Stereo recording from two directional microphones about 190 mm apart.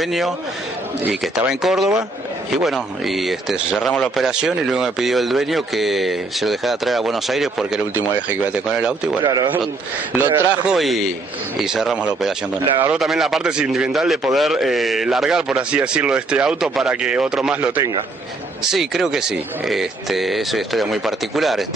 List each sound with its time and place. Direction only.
0.0 s a man's voice: centre (ahead or behind)
9.2 s a man's voice: 20° right (ahead or behind)
10.8 s a man's voice: centre (ahead or behind)